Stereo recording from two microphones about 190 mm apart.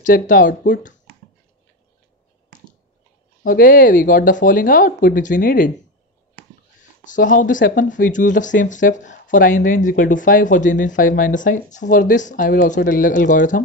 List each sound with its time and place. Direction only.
0.0 s speech: 45° left (ahead or behind)
3.4 s speech: 50° left (ahead or behind)
7.1 s speech: 45° left (ahead or behind)